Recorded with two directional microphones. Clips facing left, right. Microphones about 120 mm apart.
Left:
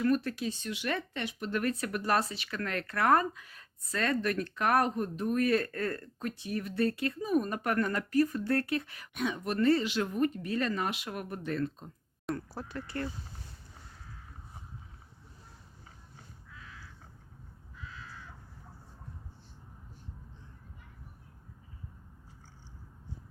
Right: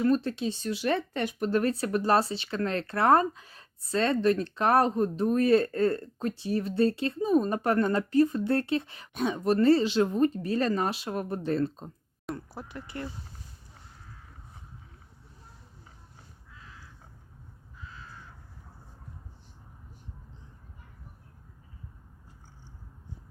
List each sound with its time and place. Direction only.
0.0 s speech: 25° right (ahead or behind)
1.2 s speech: 45° right (ahead or behind)
12.3 s speech: 15° right (ahead or behind)